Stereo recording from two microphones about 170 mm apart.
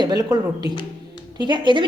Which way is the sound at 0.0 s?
20° right (ahead or behind).